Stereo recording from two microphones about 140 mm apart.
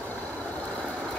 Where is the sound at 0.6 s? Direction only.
5° left (ahead or behind).